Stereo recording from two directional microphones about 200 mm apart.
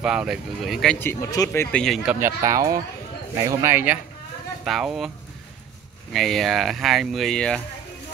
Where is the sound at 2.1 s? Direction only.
15° right (ahead or behind).